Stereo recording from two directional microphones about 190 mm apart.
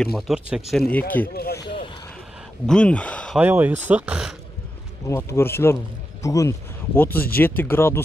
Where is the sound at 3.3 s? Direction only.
10° right (ahead or behind).